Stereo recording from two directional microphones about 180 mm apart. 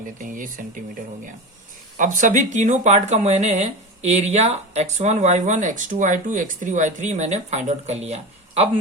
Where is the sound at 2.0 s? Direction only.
45° right (ahead or behind).